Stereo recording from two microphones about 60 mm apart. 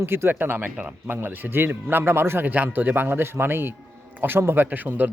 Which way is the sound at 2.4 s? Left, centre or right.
Right.